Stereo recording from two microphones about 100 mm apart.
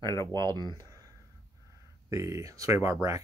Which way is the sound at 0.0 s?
45° right (ahead or behind).